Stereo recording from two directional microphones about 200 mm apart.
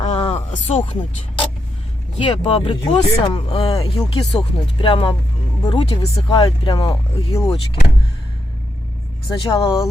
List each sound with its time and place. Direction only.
0.0 s a sound: 30° left (ahead or behind)
2.1 s speech: 25° left (ahead or behind)
9.3 s speech: 25° left (ahead or behind)